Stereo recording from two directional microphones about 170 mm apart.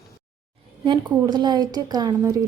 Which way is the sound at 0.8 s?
30° right (ahead or behind).